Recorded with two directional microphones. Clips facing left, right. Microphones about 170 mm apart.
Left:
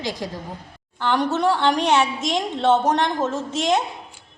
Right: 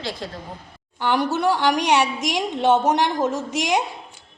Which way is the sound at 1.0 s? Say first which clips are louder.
Even; 10° right (ahead or behind).